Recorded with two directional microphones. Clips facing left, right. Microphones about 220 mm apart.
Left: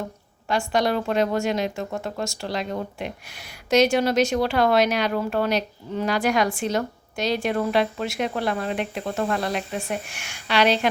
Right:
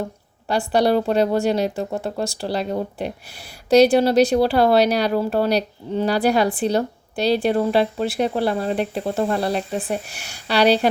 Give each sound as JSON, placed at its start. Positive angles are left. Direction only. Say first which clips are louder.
{"t": 0.4, "sound": "speech", "louder": "right 4 dB", "side_deg": -35}